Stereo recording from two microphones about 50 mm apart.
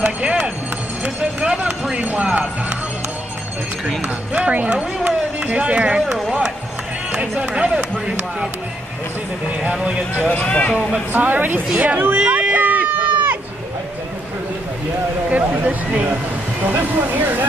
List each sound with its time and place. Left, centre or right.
0.0 s music: right
1.4 s run: centre
2.1 s speech: right
4.3 s speech: right
9.6 s speech: right
10.4 s a man's voice: left
11.1 s speech: right
12.3 s a sound: right
15.2 s speech: right